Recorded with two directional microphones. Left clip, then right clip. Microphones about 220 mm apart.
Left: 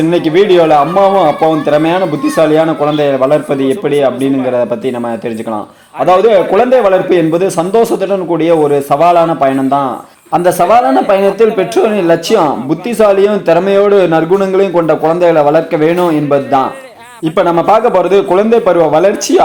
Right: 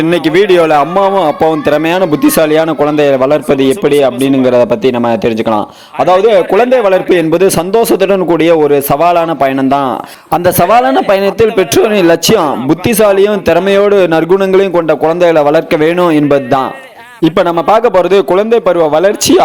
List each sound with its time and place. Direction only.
0.1 s a man's voice: 40° right (ahead or behind)